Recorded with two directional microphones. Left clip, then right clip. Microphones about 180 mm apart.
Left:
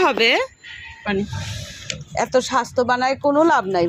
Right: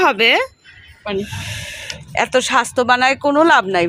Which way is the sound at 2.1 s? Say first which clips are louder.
Right 4 dB; centre (ahead or behind).